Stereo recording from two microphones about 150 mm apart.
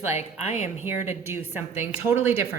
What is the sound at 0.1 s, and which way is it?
Speech, 50° left (ahead or behind).